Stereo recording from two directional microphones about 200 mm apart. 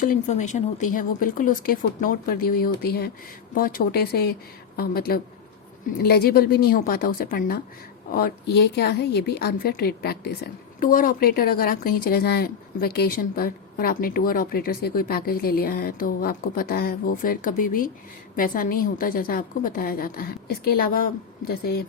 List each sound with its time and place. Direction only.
0.0 s speech: 40° left (ahead or behind)